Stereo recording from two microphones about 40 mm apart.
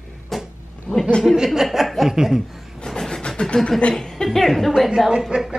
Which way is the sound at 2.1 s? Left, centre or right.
Centre.